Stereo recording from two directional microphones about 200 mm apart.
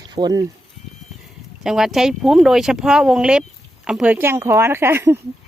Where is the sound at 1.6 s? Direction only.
Centre (ahead or behind).